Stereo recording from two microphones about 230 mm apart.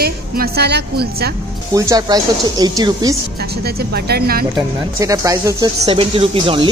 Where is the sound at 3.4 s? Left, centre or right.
Right.